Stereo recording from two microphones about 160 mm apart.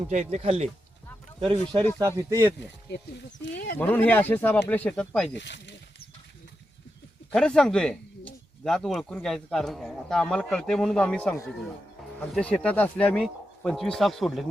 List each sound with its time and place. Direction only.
0.1 s speech: 45° right (ahead or behind)
1.4 s speech: 30° right (ahead or behind)
2.9 s speech: 90° left
3.5 s speech: 75° left (ahead or behind)
3.8 s speech: 10° left (ahead or behind)
5.3 s speech: 90° left
7.3 s speech: 5° left (ahead or behind)